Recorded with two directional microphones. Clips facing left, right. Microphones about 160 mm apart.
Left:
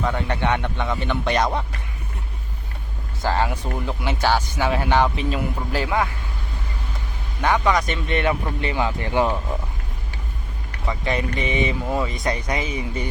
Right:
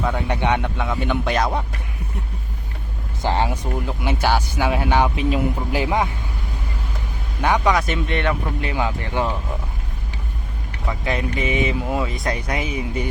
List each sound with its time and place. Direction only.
0.0 s speech: 10° right (ahead or behind)
3.2 s speech: 20° right (ahead or behind)
7.4 s speech: 10° right (ahead or behind); by 8.5 s 5° left (ahead or behind)
8.6 s speech: 10° right (ahead or behind)
10.8 s speech: centre (ahead or behind)